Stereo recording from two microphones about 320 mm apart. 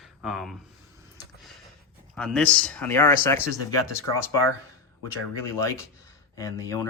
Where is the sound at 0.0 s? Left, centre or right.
Centre.